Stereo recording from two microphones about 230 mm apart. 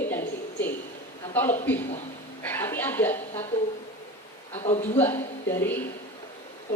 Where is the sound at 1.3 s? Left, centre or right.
Centre.